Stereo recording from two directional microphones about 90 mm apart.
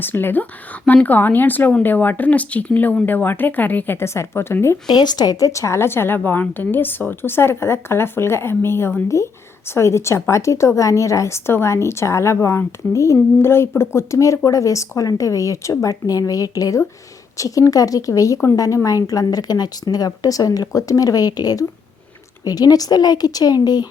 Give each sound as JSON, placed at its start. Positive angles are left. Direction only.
{"t": 0.0, "sound": "speech", "side_deg": 25}
{"t": 4.9, "sound": "a woman's voice", "side_deg": 50}